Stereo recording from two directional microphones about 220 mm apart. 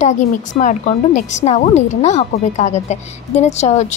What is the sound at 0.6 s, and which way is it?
Speech, 35° left (ahead or behind).